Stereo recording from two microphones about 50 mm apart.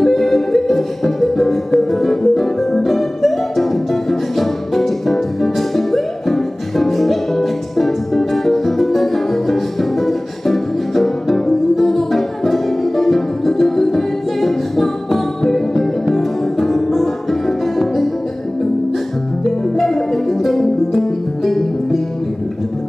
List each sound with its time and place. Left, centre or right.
0.0 s music: centre
19.8 s music: centre